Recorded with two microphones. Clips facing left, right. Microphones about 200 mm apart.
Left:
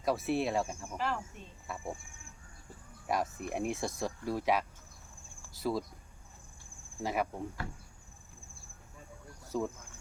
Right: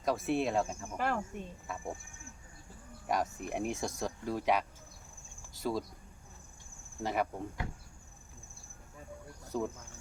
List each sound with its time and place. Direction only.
0.0 s speech: centre (ahead or behind)
0.9 s speech: 55° right (ahead or behind)
1.7 s speech: centre (ahead or behind)
3.1 s speech: centre (ahead or behind)
7.0 s speech: centre (ahead or behind)
9.5 s speech: centre (ahead or behind)